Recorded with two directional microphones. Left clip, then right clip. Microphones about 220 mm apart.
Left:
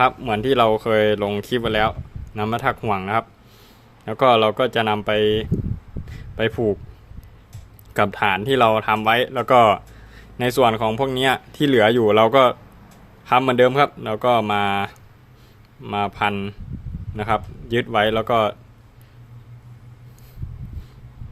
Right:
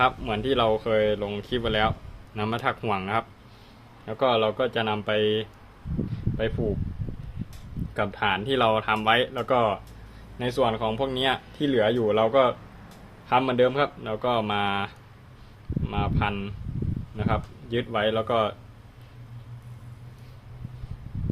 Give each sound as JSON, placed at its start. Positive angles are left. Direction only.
{"t": 0.0, "sound": "speech", "side_deg": 25}
{"t": 7.9, "sound": "speech", "side_deg": 35}